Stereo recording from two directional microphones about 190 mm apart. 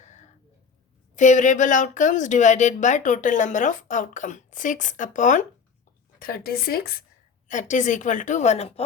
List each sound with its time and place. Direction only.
0.0 s a sound: 40° left (ahead or behind)
1.1 s speech: 40° left (ahead or behind)
7.4 s speech: 40° left (ahead or behind)